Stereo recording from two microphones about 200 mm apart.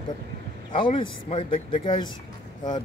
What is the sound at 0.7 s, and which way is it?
Speech, 25° left (ahead or behind).